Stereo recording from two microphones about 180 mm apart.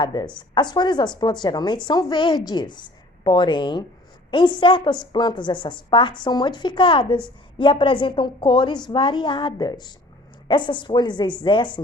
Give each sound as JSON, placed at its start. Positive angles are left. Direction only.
{"t": 0.0, "sound": "a woman's voice", "side_deg": 25}